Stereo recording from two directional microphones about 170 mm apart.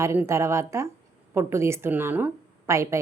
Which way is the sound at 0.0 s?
15° right (ahead or behind).